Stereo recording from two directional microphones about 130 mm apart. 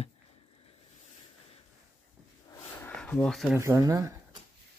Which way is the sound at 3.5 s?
20° right (ahead or behind).